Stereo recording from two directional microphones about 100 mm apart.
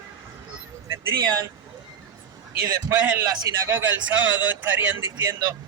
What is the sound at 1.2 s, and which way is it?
Speech, 40° right (ahead or behind).